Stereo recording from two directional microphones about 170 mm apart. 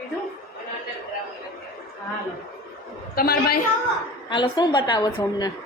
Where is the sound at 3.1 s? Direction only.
65° left (ahead or behind).